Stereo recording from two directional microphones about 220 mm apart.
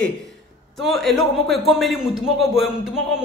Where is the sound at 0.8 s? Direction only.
Centre (ahead or behind).